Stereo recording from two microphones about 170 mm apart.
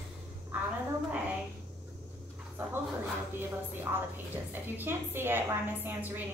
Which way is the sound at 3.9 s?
20° right (ahead or behind).